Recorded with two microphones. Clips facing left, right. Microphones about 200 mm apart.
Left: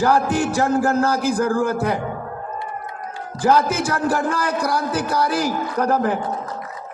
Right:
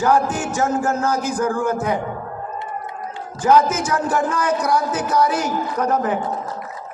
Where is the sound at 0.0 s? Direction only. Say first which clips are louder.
Left 1 dB; 35° left (ahead or behind).